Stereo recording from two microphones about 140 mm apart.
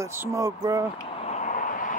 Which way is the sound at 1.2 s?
60° left (ahead or behind).